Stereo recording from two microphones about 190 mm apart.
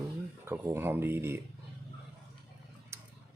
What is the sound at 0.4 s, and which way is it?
Speech, 10° right (ahead or behind).